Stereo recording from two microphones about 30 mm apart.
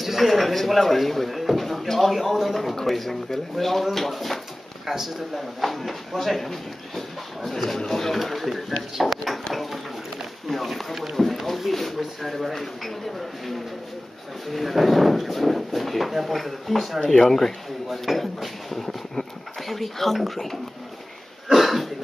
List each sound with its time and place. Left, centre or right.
0.0 s speech: centre
4.8 s speech: centre
5.7 s speech: centre
11.4 s a sound: centre
14.5 s speech: centre
17.0 s speech: left
17.8 s speech: centre
21.6 s cough: centre